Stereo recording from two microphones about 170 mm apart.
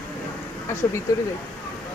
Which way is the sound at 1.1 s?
20° left (ahead or behind).